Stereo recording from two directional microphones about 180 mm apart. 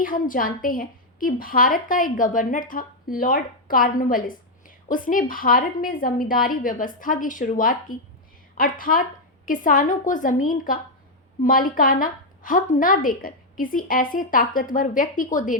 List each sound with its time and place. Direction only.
0.0 s a woman's voice: 50° left (ahead or behind)